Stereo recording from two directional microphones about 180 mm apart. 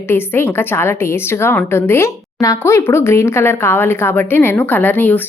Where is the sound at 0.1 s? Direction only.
10° left (ahead or behind).